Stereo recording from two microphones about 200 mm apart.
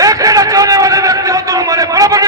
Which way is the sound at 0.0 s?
15° right (ahead or behind).